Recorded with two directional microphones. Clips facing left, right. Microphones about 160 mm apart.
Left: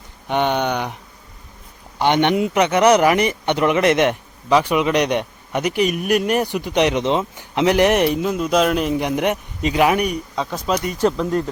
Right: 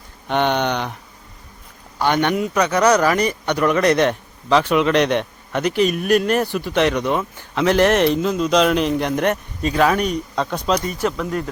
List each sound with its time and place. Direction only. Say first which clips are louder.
0.3 s a man's voice: even; 10° left (ahead or behind)
2.0 s a man's voice: left 2 dB; 20° left (ahead or behind); by 10.8 s centre (ahead or behind)
11.0 s speech: left 4 dB; 25° left (ahead or behind)